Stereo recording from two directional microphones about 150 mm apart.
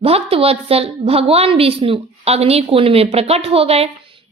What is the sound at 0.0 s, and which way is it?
A woman's voice, 40° right (ahead or behind).